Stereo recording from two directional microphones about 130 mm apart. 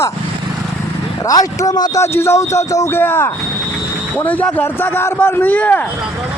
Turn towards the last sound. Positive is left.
turn(degrees=10)  # may be behind; listen again after turning